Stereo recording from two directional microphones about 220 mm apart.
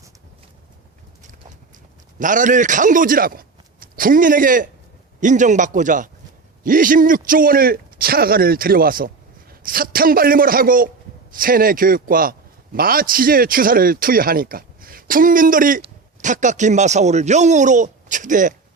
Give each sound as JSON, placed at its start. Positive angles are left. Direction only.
{"t": 2.1, "sound": "a man's voice", "side_deg": -35}